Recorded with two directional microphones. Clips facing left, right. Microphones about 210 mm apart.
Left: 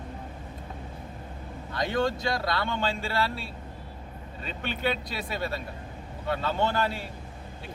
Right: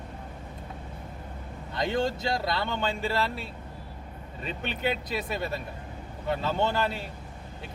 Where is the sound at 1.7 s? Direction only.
25° right (ahead or behind).